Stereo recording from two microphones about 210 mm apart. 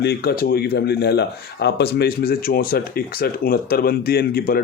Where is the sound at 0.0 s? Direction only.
50° left (ahead or behind).